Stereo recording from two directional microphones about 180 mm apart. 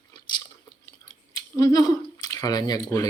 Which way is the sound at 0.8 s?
20° left (ahead or behind).